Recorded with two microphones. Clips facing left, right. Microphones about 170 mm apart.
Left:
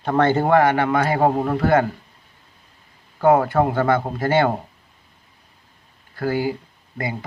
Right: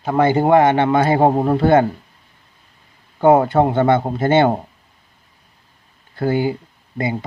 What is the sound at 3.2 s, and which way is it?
A man's voice, 25° right (ahead or behind).